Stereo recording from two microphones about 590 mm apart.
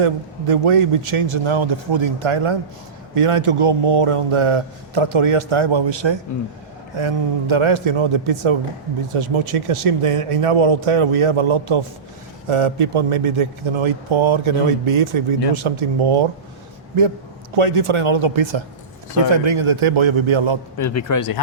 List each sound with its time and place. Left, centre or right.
0.0 s a man's voice: right
17.5 s a man's voice: right
20.7 s speech: left